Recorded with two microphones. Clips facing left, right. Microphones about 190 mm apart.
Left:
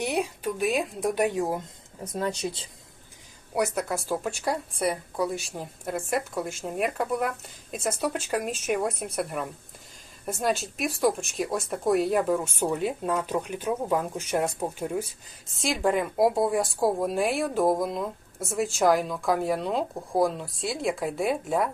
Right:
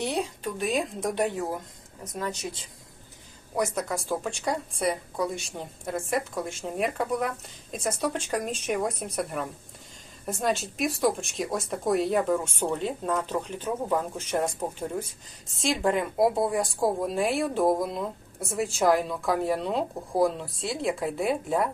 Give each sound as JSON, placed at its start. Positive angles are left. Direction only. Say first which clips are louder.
{"t": 0.0, "sound": "a woman's voice", "louder": "left 2 dB", "side_deg": 10}
{"t": 2.1, "sound": "speech", "louder": "left 4 dB", "side_deg": 30}
{"t": 3.5, "sound": "a woman's voice", "louder": "left 1 dB", "side_deg": 10}